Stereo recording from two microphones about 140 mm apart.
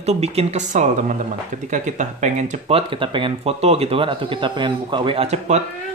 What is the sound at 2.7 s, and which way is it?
Speech, 40° right (ahead or behind).